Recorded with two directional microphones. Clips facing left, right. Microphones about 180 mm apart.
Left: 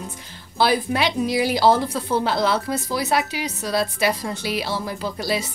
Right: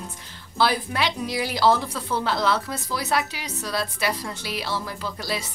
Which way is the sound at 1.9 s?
25° left (ahead or behind).